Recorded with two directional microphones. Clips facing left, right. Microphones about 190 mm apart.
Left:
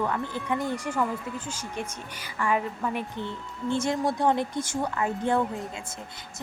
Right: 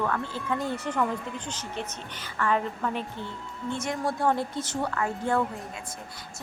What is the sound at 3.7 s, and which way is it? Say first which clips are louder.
Speech: left 5 dB; 30° left (ahead or behind).